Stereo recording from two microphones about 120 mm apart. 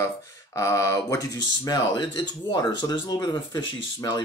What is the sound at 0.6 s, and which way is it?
Speech, 25° left (ahead or behind).